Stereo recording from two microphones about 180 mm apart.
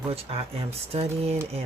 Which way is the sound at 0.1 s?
35° right (ahead or behind).